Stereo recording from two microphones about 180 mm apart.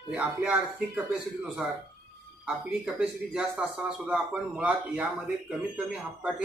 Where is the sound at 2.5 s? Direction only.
5° right (ahead or behind).